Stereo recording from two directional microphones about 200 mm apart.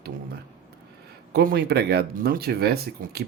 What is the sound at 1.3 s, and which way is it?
Speech, 50° right (ahead or behind).